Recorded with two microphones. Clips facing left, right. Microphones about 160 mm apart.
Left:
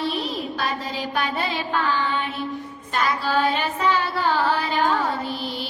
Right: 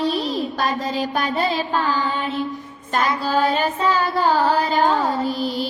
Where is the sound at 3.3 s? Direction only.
40° right (ahead or behind).